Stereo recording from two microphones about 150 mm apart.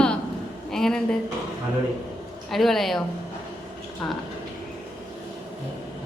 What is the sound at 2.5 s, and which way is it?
Speech, centre (ahead or behind).